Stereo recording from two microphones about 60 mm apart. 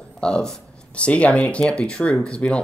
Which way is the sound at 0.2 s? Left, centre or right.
Centre.